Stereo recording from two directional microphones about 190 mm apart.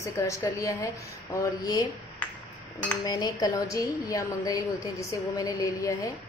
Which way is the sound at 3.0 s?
20° left (ahead or behind).